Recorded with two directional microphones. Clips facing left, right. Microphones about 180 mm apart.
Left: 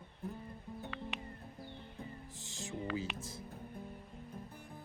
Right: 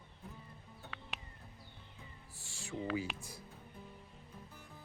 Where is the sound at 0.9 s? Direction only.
Centre (ahead or behind).